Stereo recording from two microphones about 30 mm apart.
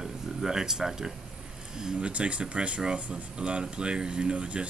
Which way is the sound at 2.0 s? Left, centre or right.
Right.